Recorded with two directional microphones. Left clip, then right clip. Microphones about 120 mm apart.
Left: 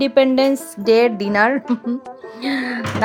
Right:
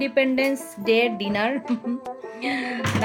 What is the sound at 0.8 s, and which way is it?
Speech, 15° left (ahead or behind).